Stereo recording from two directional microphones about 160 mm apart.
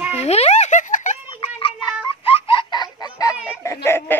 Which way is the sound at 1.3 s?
35° left (ahead or behind).